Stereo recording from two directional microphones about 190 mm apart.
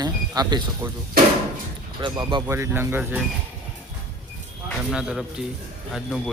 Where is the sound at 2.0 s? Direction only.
25° right (ahead or behind); by 3.2 s 10° right (ahead or behind).